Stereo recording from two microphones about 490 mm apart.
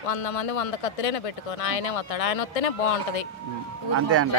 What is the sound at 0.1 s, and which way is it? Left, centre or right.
Speech, left.